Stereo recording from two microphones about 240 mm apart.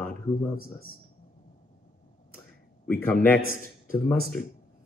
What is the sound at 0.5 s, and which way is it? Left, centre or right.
Speech, left.